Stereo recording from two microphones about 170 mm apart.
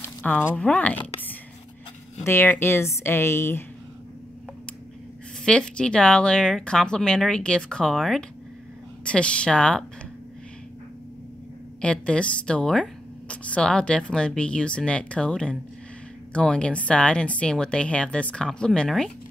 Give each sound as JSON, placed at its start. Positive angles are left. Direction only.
{"t": 0.0, "sound": "a sound", "side_deg": 10}
{"t": 0.6, "sound": "a woman's voice", "side_deg": 5}
{"t": 2.2, "sound": "a woman's voice", "side_deg": 15}
{"t": 5.4, "sound": "a woman's voice", "side_deg": 5}
{"t": 11.8, "sound": "a woman's voice", "side_deg": 5}